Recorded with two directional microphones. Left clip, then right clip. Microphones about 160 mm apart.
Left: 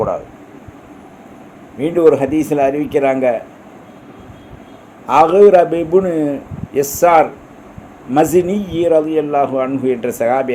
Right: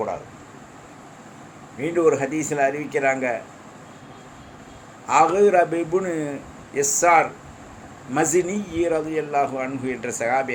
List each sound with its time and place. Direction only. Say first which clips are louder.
1.8 s a man's voice: left 8 dB; 40° left (ahead or behind)
5.0 s a man's voice: left 8 dB; 40° left (ahead or behind)
8.4 s speech: left 8 dB; 5° right (ahead or behind)
9.1 s speech: left 8 dB; 40° left (ahead or behind)